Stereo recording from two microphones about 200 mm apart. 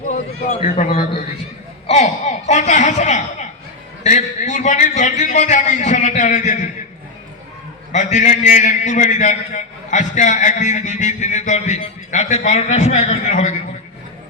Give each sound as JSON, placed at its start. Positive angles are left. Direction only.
{"t": 0.8, "sound": "a man's voice", "side_deg": 40}
{"t": 1.9, "sound": "a sound", "side_deg": 35}
{"t": 7.9, "sound": "a man's voice", "side_deg": 40}